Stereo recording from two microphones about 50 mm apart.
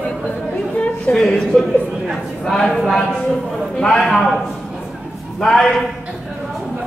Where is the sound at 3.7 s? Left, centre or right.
Centre.